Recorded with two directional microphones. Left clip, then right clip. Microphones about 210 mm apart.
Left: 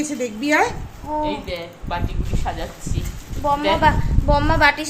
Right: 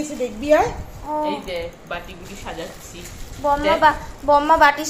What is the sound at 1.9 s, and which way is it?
Speech, 20° left (ahead or behind).